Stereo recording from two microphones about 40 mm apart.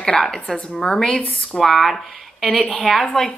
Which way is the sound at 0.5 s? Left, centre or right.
Left.